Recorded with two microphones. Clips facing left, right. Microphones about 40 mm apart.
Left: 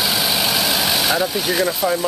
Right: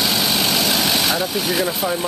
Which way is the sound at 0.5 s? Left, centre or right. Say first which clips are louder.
Even; centre.